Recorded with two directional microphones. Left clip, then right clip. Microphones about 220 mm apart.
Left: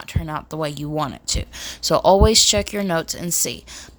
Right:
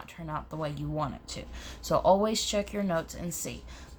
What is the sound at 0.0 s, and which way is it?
A woman's voice, 45° left (ahead or behind).